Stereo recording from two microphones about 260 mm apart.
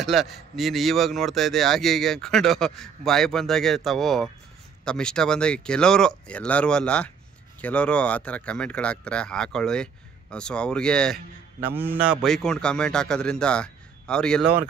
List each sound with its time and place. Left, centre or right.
0.0 s a man's voice: centre
11.6 s a man's voice: centre